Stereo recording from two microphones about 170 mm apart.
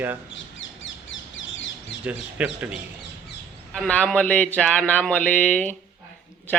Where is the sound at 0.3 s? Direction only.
90° left.